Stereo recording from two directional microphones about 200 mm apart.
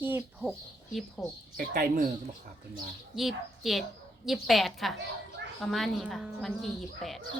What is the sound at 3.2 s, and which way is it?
Speech, centre (ahead or behind).